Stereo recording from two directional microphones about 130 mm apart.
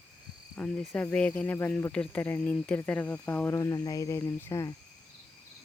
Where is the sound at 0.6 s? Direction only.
10° left (ahead or behind).